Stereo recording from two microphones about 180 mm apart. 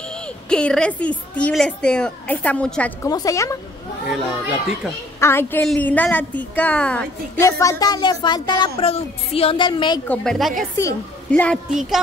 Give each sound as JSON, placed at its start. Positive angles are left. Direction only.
{"t": 0.5, "sound": "a woman's voice", "side_deg": 5}
{"t": 3.1, "sound": "speech", "side_deg": 20}
{"t": 5.2, "sound": "a woman's voice", "side_deg": 15}
{"t": 7.4, "sound": "speech", "side_deg": 15}
{"t": 10.0, "sound": "a woman's voice", "side_deg": 5}
{"t": 10.8, "sound": "a woman's voice", "side_deg": 15}